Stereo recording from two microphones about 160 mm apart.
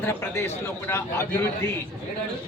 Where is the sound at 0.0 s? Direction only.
15° left (ahead or behind).